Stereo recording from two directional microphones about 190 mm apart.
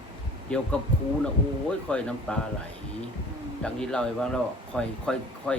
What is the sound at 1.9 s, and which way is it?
Speech, 5° left (ahead or behind).